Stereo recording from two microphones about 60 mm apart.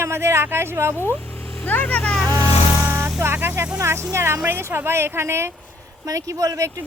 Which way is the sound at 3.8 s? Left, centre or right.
Right.